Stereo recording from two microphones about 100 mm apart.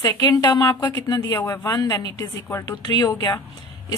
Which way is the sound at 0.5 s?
40° left (ahead or behind).